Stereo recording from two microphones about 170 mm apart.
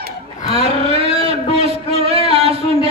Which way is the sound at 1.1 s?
35° right (ahead or behind).